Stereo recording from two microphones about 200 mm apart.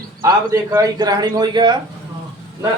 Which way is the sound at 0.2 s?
15° right (ahead or behind).